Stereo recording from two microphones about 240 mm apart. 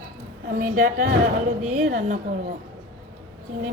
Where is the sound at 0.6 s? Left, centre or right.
Right.